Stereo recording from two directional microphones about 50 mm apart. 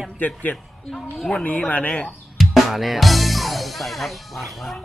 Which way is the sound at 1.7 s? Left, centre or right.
Left.